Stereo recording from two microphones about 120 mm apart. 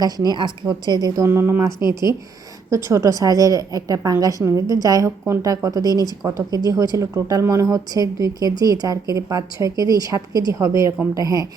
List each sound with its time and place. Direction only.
0.0 s a woman's voice: 35° right (ahead or behind)
1.2 s a woman's voice: 20° right (ahead or behind)